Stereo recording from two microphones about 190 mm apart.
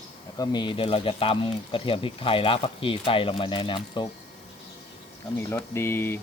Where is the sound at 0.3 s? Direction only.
20° left (ahead or behind).